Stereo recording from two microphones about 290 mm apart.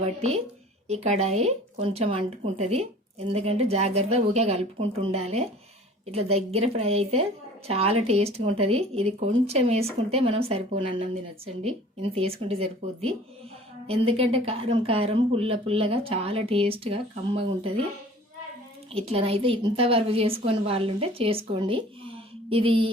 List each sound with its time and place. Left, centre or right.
0.0 s a woman's voice: right
18.9 s a woman's voice: centre